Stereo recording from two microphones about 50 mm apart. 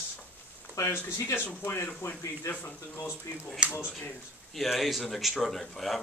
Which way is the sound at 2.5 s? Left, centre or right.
Left.